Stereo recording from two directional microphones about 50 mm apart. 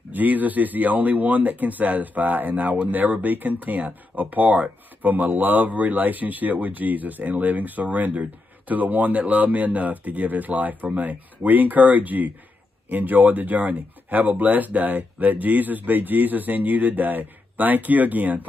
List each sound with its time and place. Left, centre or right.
0.1 s speech: right